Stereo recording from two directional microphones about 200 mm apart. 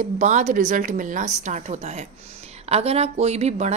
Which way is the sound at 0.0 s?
35° right (ahead or behind).